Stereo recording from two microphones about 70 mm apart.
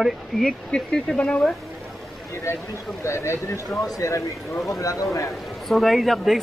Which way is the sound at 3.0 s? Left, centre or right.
Left.